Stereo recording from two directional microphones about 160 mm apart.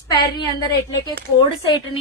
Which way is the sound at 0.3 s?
25° left (ahead or behind).